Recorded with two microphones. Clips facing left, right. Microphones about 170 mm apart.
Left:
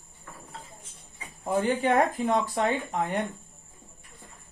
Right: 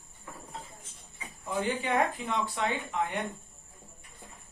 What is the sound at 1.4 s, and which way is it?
Speech, 50° left (ahead or behind).